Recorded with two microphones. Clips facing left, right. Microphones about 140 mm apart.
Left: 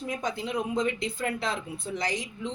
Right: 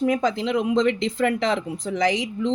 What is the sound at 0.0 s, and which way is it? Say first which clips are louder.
Speech: right 10 dB; 90° right.